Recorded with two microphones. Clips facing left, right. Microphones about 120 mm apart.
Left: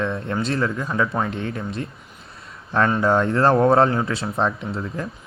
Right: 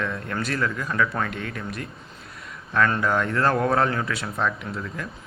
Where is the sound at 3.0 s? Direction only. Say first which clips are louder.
Left 5 dB; 30° left (ahead or behind).